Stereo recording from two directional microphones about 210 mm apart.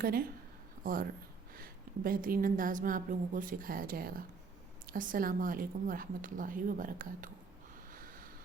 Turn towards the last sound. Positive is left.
turn(degrees=-40)  # may be behind; listen again after turning